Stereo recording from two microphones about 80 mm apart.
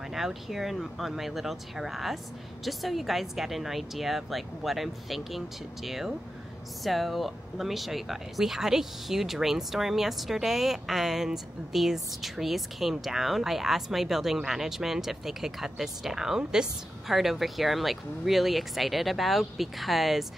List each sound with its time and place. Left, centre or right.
0.1 s speech: centre